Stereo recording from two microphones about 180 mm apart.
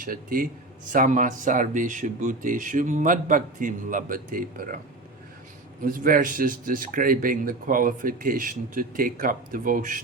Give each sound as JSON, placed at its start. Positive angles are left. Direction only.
{"t": 0.0, "sound": "speech", "side_deg": -50}
{"t": 5.8, "sound": "speech", "side_deg": -50}